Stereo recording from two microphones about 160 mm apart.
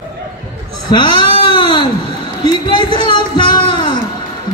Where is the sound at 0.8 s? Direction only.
30° left (ahead or behind).